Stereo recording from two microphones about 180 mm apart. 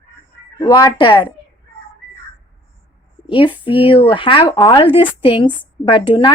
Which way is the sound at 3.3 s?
30° left (ahead or behind).